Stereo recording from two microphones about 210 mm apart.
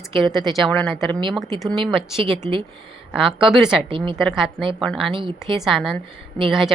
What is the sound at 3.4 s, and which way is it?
Speech, centre (ahead or behind).